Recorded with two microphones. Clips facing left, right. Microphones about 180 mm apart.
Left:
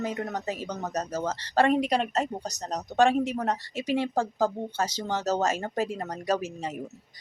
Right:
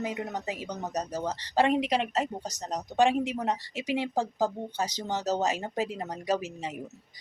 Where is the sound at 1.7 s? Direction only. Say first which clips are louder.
Left 2 dB; 45° left (ahead or behind).